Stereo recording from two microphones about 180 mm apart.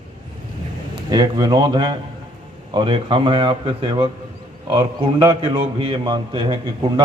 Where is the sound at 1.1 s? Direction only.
20° right (ahead or behind).